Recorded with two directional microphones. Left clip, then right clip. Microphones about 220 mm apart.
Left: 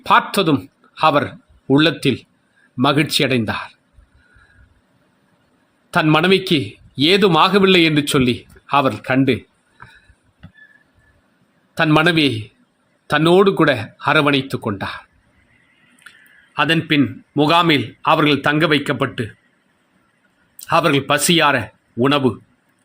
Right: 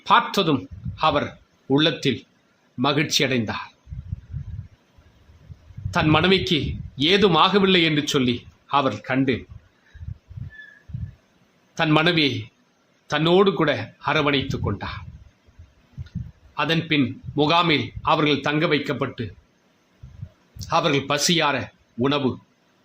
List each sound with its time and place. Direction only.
0.0 s a man's voice: 25° left (ahead or behind)
5.9 s a man's voice: 25° left (ahead or behind)
11.7 s a man's voice: 25° left (ahead or behind)
16.6 s a man's voice: 20° left (ahead or behind)
20.7 s a man's voice: 25° left (ahead or behind)